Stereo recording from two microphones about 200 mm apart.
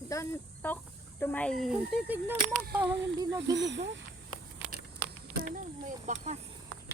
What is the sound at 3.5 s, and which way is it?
Speech, 60° right (ahead or behind).